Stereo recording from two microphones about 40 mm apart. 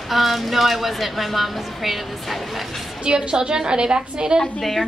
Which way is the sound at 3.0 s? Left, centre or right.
Right.